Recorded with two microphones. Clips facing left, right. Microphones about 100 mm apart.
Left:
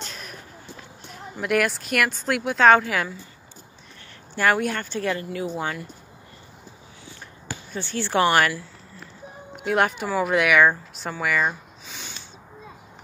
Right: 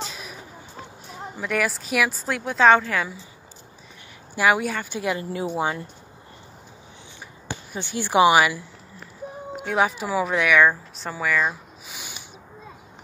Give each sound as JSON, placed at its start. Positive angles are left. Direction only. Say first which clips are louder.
{"t": 0.0, "sound": "vehicle", "louder": "right 3 dB", "side_deg": -5}
{"t": 1.0, "sound": "speech", "louder": "left 2 dB", "side_deg": 0}
{"t": 4.4, "sound": "speech", "louder": "right 1 dB", "side_deg": -5}
{"t": 7.4, "sound": "speech", "louder": "even", "side_deg": -15}
{"t": 9.6, "sound": "speech", "louder": "left 1 dB", "side_deg": 0}
{"t": 11.9, "sound": "a sound", "louder": "even", "side_deg": -10}